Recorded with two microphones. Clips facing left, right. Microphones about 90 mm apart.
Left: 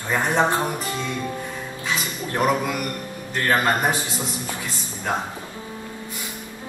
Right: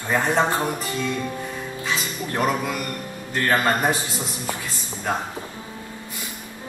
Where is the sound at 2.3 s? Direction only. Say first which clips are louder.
Left 2 dB; 20° left (ahead or behind).